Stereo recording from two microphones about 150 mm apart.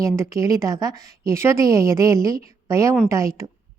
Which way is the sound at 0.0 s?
20° right (ahead or behind).